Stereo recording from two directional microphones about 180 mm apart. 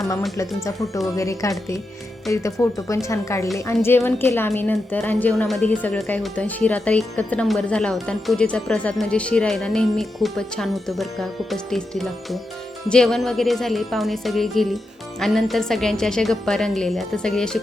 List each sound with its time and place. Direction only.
0.3 s a woman's voice: 20° left (ahead or behind)